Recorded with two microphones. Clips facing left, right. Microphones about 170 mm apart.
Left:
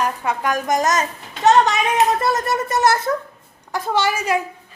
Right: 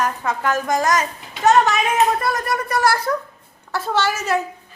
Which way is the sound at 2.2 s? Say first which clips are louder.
Left 2 dB; 25° left (ahead or behind).